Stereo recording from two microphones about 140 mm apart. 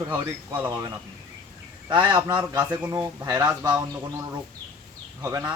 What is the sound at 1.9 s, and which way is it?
Speech, 30° right (ahead or behind).